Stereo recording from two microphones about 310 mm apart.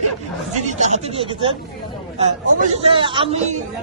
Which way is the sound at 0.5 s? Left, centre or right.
Right.